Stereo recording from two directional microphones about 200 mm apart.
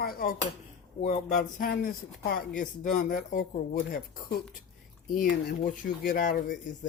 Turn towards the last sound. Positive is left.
turn(degrees=45)  # may be behind; listen again after turning